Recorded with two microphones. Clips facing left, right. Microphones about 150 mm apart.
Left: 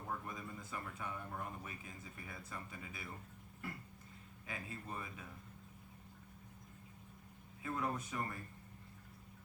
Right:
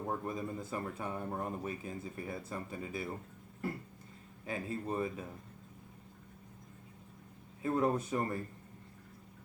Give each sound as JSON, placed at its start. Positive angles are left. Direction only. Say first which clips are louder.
{"t": 0.1, "sound": "speech", "louder": "right 6 dB", "side_deg": -40}
{"t": 4.4, "sound": "speech", "louder": "right 10 dB", "side_deg": -35}
{"t": 7.6, "sound": "speech", "louder": "right 9 dB", "side_deg": -35}